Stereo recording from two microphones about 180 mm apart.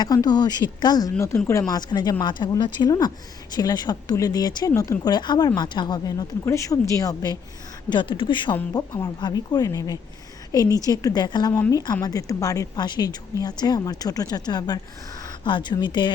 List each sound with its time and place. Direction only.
0.0 s speech: 20° left (ahead or behind)